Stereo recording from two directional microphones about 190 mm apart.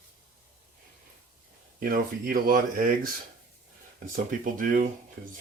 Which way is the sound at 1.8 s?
50° right (ahead or behind).